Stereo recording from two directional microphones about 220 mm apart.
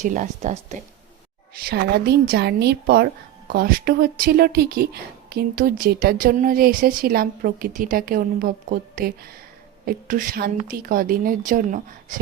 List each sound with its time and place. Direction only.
0.0 s speech: 35° right (ahead or behind)
1.6 s a woman's voice: 45° right (ahead or behind)